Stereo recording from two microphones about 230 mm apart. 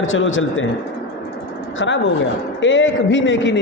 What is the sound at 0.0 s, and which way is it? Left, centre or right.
Speech, left.